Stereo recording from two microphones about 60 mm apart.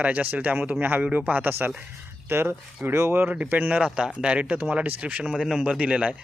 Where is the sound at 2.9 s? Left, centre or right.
Right.